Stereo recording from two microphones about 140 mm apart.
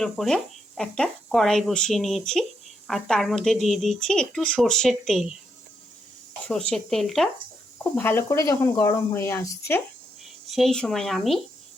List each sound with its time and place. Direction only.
0.0 s speech: centre (ahead or behind)
6.5 s speech: 5° left (ahead or behind)
7.9 s speech: 15° left (ahead or behind)
10.5 s speech: centre (ahead or behind)